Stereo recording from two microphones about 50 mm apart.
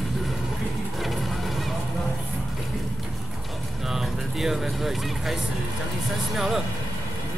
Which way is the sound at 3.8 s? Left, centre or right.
Centre.